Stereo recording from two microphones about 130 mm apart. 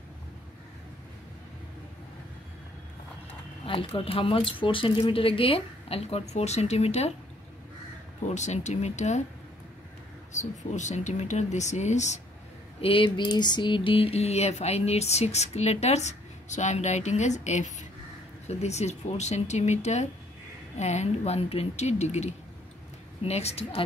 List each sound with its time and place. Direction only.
3.6 s speech: 45° left (ahead or behind)
8.4 s speech: 65° left (ahead or behind)
10.3 s speech: 65° left (ahead or behind)
12.8 s speech: 40° left (ahead or behind)